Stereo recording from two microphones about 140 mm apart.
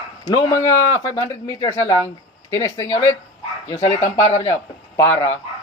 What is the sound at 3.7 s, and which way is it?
Speech, 50° left (ahead or behind).